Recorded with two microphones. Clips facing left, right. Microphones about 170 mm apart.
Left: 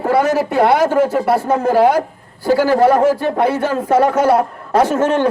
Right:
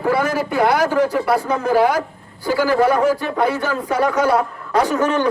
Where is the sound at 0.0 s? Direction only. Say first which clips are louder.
Left 4 dB; 35° left (ahead or behind).